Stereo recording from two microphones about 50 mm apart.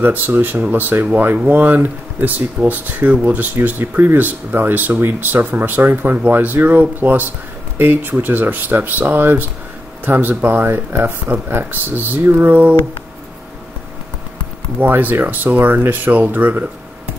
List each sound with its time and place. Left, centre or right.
0.0 s speech: right
6.1 s speech: right
14.8 s speech: right